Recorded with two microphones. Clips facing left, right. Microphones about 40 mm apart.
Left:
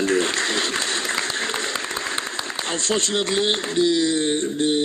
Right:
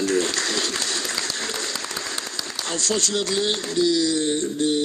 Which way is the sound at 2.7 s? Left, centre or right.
Left.